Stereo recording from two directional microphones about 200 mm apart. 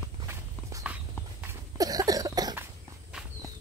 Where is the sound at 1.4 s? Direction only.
15° right (ahead or behind).